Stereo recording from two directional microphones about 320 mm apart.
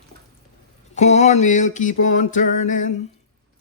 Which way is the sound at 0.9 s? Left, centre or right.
Left.